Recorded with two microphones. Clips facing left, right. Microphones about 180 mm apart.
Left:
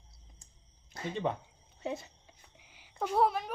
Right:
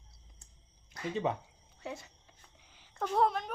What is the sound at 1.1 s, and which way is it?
Speech, 5° right (ahead or behind).